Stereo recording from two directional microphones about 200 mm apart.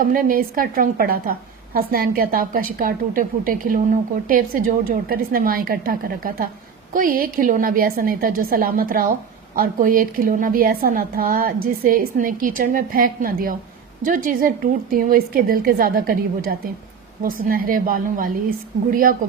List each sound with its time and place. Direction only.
0.0 s a woman's voice: 45° right (ahead or behind)